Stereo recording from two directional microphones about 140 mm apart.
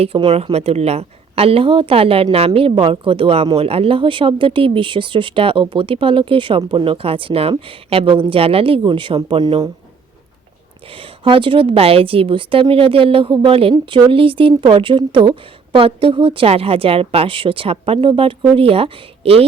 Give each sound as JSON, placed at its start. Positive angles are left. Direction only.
{"t": 0.0, "sound": "a woman's voice", "side_deg": -45}
{"t": 10.9, "sound": "a woman's voice", "side_deg": -40}